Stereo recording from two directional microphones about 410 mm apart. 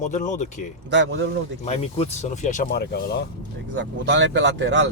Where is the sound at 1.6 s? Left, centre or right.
Centre.